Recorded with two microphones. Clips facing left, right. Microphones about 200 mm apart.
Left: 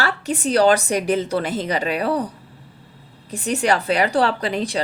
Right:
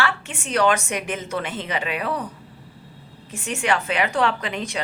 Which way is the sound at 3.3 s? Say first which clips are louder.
Left 4 dB; 35° left (ahead or behind).